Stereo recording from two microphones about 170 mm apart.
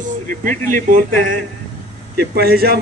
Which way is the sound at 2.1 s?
65° right (ahead or behind).